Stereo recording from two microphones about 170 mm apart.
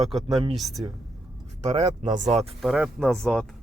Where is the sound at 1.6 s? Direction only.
40° right (ahead or behind).